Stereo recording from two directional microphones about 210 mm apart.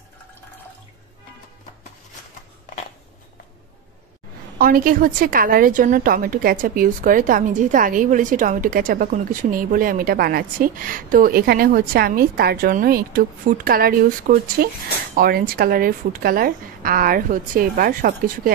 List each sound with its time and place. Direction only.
4.6 s a woman's voice: 45° right (ahead or behind)